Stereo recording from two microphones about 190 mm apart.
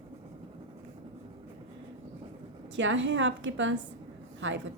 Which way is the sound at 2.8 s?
75° right (ahead or behind).